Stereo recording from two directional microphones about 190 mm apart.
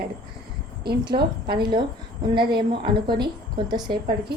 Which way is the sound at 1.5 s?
25° right (ahead or behind).